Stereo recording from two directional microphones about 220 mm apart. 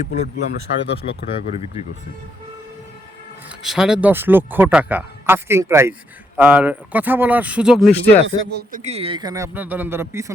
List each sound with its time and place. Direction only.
0.0 s speech: 35° left (ahead or behind)
3.6 s speech: centre (ahead or behind)
8.4 s speech: 50° right (ahead or behind)
8.8 s speech: 30° right (ahead or behind); by 10.3 s 10° right (ahead or behind)